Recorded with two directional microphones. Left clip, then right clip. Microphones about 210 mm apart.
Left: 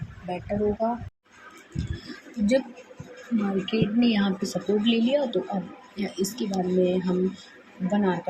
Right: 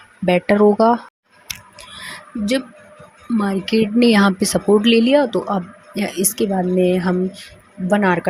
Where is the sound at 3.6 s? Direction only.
55° right (ahead or behind).